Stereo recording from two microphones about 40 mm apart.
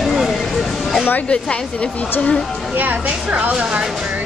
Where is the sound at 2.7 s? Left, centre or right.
Right.